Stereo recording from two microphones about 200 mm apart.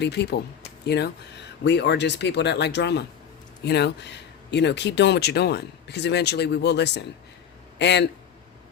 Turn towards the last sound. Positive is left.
turn(degrees=60)  # may be behind; listen again after turning